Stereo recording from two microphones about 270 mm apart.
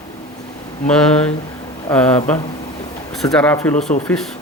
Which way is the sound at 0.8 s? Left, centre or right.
Centre.